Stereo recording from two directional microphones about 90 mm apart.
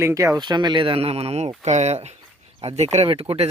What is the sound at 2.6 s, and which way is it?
Speech, 90° right.